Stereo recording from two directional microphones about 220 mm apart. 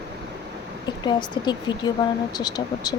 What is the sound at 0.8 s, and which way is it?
Speech, 20° left (ahead or behind).